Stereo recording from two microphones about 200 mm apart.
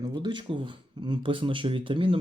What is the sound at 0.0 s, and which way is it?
Speech, 20° right (ahead or behind).